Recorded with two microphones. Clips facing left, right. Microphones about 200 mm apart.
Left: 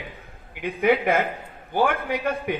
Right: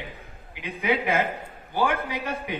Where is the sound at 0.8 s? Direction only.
50° left (ahead or behind).